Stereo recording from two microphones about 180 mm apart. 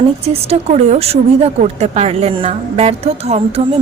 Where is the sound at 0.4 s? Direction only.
35° right (ahead or behind).